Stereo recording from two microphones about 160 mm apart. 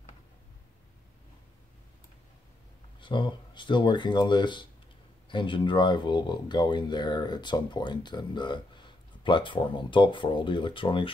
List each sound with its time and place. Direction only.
3.0 s speech: 30° left (ahead or behind)